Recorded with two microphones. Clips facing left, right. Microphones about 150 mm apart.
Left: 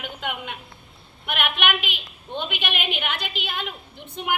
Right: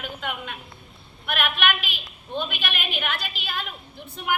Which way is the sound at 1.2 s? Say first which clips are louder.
Even; 20° left (ahead or behind).